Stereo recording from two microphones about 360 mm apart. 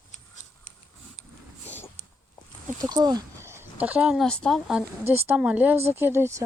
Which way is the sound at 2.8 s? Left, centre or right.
Centre.